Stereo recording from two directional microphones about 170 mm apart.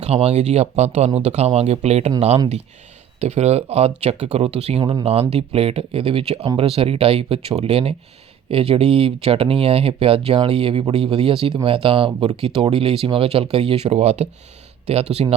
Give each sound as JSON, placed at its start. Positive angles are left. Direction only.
{"t": 0.0, "sound": "speech", "side_deg": -35}
{"t": 3.2, "sound": "speech", "side_deg": -40}